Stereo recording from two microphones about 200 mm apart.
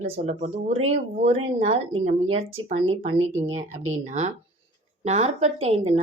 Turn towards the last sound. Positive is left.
turn(degrees=-30)  # may be behind; listen again after turning